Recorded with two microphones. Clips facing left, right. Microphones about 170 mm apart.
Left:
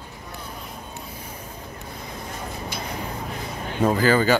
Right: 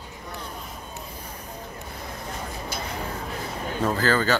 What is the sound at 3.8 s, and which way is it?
Speech, 15° left (ahead or behind).